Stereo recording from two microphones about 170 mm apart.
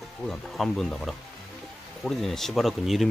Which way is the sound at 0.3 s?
Centre (ahead or behind).